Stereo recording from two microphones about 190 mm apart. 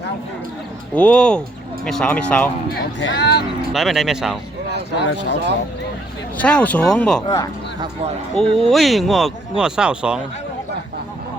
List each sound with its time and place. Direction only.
0.9 s speech: 5° left (ahead or behind)
2.7 s speech: 60° left (ahead or behind)
3.7 s speech: centre (ahead or behind)
4.9 s speech: 65° left (ahead or behind)
6.4 s speech: 5° left (ahead or behind)
7.2 s speech: 15° left (ahead or behind)
8.7 s speech: centre (ahead or behind)